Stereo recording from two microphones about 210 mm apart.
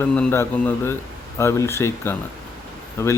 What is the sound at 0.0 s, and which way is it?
Speech, 10° left (ahead or behind).